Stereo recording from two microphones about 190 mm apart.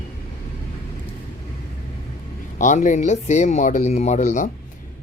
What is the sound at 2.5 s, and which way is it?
Speech, 40° left (ahead or behind).